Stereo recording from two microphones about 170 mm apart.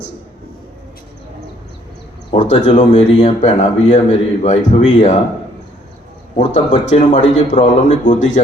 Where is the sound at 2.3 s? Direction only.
35° left (ahead or behind).